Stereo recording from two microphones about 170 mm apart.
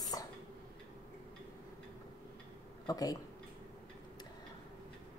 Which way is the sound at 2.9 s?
20° left (ahead or behind).